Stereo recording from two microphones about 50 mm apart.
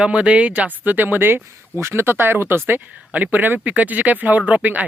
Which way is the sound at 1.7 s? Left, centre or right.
Right.